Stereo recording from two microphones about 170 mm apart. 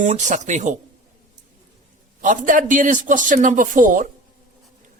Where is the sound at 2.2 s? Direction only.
50° right (ahead or behind).